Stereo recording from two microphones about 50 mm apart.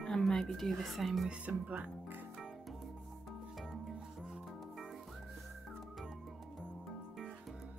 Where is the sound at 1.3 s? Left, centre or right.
Right.